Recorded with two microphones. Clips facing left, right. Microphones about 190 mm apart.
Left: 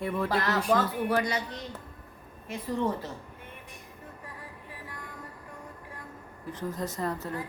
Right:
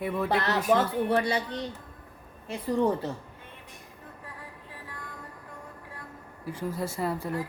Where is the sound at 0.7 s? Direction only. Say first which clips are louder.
Right 3 dB; 30° right (ahead or behind).